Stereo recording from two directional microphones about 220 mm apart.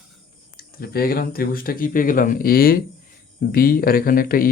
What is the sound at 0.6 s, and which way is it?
Speech, 45° left (ahead or behind).